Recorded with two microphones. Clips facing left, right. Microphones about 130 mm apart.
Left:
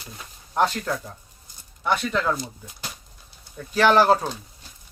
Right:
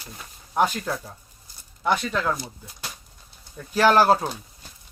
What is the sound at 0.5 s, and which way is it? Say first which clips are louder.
Speech: even; 10° right (ahead or behind).